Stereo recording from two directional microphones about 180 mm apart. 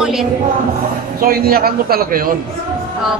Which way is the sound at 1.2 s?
55° right (ahead or behind).